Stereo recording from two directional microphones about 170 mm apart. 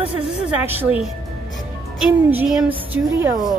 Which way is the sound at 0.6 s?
10° right (ahead or behind).